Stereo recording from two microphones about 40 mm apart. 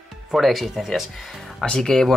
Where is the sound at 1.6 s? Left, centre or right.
Centre.